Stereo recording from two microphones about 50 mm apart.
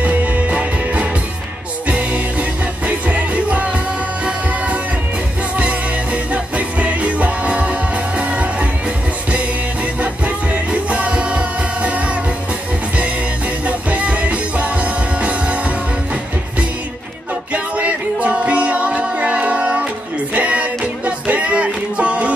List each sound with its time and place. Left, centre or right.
0.0 s music: right
6.3 s music: right
9.9 s music: right
13.7 s music: right
17.5 s music: right